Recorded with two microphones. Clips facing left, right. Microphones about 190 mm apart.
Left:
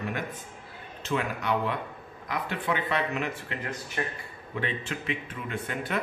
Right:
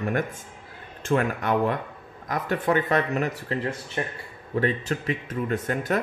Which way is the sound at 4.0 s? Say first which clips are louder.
Right 2 dB; 25° right (ahead or behind).